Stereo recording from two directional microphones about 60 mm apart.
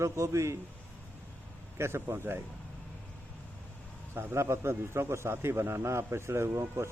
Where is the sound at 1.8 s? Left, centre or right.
Right.